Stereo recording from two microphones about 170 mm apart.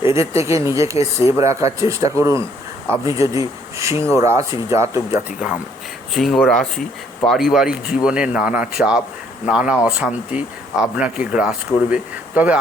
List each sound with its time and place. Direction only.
0.1 s speech: 15° right (ahead or behind)
6.1 s speech: centre (ahead or behind)